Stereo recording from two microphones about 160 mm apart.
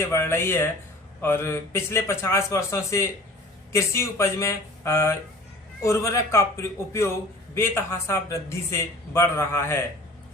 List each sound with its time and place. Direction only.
0.0 s a man's voice: 15° left (ahead or behind)